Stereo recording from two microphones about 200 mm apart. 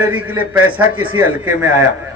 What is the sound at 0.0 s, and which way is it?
Speech, 10° right (ahead or behind).